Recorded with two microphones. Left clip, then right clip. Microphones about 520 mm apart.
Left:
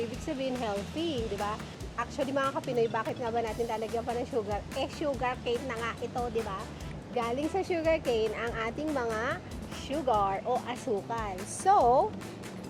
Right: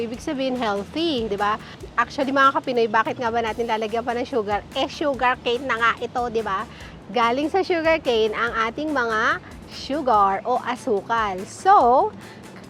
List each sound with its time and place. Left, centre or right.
0.3 s speech: right